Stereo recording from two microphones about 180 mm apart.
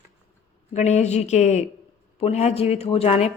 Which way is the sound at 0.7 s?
40° left (ahead or behind).